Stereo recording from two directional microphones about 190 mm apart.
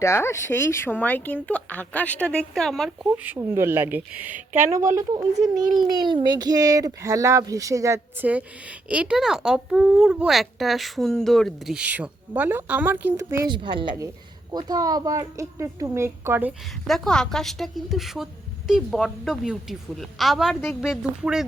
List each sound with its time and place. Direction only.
0.0 s speech: 15° left (ahead or behind)
3.2 s a woman's voice: 15° right (ahead or behind)
16.8 s a woman's voice: centre (ahead or behind)